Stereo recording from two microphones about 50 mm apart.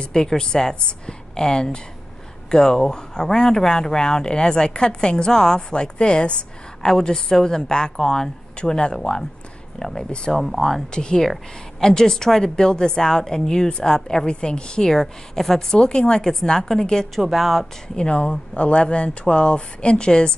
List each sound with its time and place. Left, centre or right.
0.0 s speech: centre
6.8 s speech: centre
10.4 s speech: centre
10.9 s speech: centre
14.9 s speech: centre
17.2 s speech: centre
17.9 s speech: left